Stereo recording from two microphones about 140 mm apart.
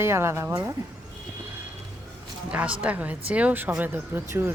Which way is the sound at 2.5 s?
10° right (ahead or behind).